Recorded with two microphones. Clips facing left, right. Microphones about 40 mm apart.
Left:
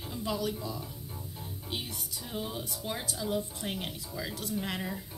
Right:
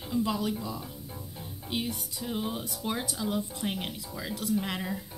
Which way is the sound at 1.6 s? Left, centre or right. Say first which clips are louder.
Right 6 dB; right.